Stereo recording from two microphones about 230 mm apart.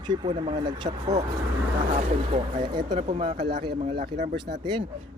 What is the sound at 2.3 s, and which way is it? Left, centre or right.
Speech, right.